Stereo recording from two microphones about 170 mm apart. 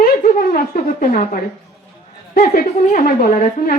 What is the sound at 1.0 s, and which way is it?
A woman's voice, 50° left (ahead or behind).